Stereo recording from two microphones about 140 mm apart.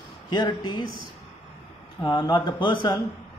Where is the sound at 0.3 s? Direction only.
30° left (ahead or behind).